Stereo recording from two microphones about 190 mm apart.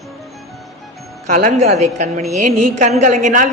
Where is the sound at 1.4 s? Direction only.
40° right (ahead or behind).